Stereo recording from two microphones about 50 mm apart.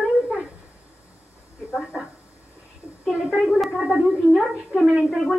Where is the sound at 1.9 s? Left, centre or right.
Centre.